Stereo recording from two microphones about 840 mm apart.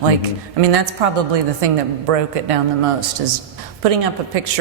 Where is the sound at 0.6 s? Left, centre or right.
Right.